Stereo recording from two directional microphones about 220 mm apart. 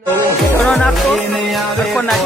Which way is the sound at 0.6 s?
Centre (ahead or behind).